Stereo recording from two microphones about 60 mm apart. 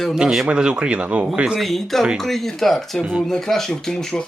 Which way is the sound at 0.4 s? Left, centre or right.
Centre.